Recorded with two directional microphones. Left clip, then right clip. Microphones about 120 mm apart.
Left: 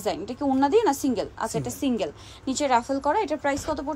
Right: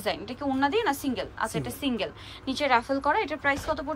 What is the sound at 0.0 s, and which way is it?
A woman's voice, 40° left (ahead or behind).